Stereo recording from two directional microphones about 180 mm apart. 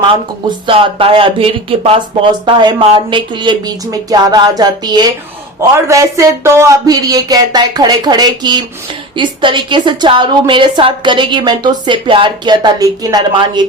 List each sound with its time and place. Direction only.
0.7 s speech: 30° right (ahead or behind)
2.5 s a woman's voice: 25° right (ahead or behind)